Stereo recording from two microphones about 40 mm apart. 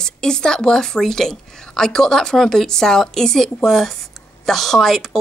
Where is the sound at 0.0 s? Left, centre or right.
Centre.